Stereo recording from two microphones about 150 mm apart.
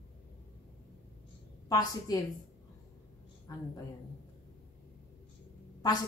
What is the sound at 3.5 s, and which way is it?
Speech, 20° left (ahead or behind).